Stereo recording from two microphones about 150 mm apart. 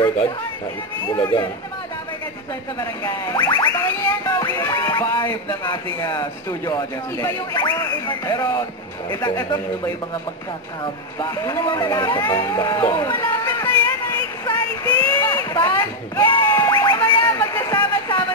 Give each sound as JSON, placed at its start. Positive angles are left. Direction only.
{"t": 1.0, "sound": "speech", "side_deg": 25}
{"t": 2.8, "sound": "speech", "side_deg": 25}
{"t": 4.6, "sound": "music", "side_deg": 25}
{"t": 5.1, "sound": "speech", "side_deg": 30}
{"t": 13.1, "sound": "a sound", "side_deg": 15}
{"t": 16.3, "sound": "a sound", "side_deg": 15}